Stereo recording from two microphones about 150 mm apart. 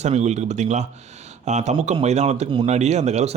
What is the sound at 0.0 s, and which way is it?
Speech, 50° right (ahead or behind).